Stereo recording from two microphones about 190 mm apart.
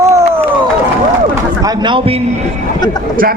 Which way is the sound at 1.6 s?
25° right (ahead or behind).